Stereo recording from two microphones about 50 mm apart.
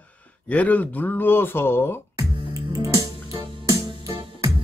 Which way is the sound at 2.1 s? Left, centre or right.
Right.